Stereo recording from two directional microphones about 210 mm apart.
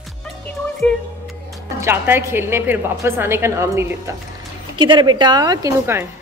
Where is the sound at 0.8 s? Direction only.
5° left (ahead or behind).